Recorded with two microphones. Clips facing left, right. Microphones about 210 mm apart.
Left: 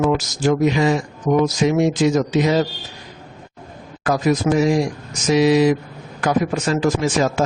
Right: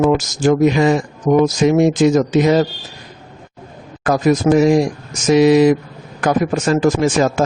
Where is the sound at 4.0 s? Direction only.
50° right (ahead or behind).